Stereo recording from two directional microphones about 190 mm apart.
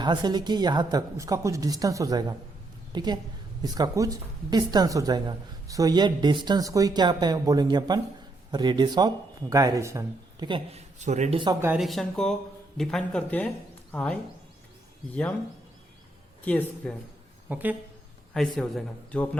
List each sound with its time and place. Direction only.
0.0 s a woman's voice: 25° right (ahead or behind)
11.4 s speech: 10° right (ahead or behind)
11.8 s speech: centre (ahead or behind)
16.4 s speech: 10° left (ahead or behind)
17.5 s speech: 10° right (ahead or behind); by 19.4 s 5° left (ahead or behind)